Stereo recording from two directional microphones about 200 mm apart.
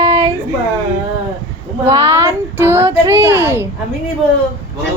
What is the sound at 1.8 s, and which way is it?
Female singing, 10° right (ahead or behind).